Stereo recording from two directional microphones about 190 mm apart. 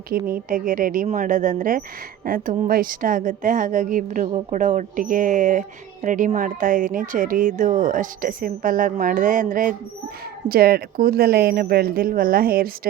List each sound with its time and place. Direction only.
0.1 s a woman's voice: 50° right (ahead or behind)